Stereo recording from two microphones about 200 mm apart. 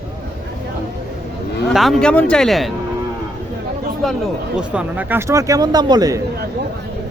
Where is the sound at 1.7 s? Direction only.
Centre (ahead or behind).